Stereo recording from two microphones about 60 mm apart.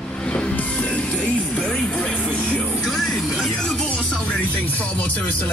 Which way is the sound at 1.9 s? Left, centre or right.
Centre.